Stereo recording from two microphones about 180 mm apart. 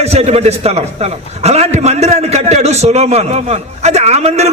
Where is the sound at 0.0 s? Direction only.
35° right (ahead or behind).